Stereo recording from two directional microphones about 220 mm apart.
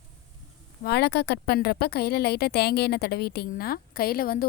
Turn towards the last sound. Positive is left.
turn(degrees=40)  # may be behind; listen again after turning